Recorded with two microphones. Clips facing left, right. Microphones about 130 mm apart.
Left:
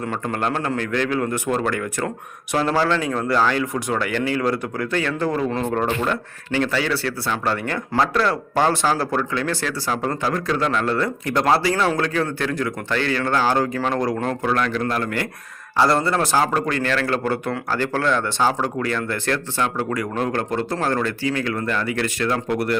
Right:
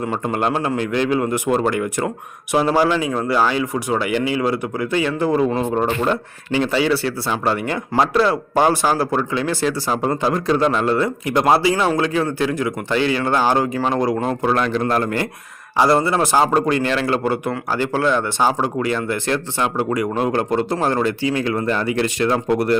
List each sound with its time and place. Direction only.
0.0 s speech: 15° right (ahead or behind)
14.4 s speech: 25° right (ahead or behind)
15.8 s speech: 10° right (ahead or behind)